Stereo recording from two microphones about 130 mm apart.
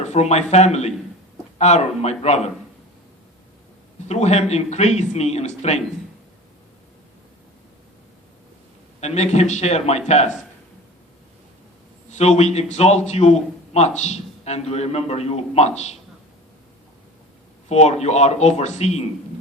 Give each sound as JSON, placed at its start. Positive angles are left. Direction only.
{"t": 0.0, "sound": "a man's voice", "side_deg": 60}
{"t": 4.1, "sound": "a man's voice", "side_deg": 60}
{"t": 9.0, "sound": "a man's voice", "side_deg": 60}
{"t": 12.1, "sound": "a man's voice", "side_deg": 60}
{"t": 17.7, "sound": "a man's voice", "side_deg": 55}